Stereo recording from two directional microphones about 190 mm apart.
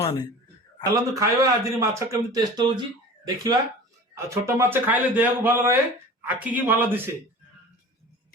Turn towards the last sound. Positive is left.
turn(degrees=-10)  # may be behind; listen again after turning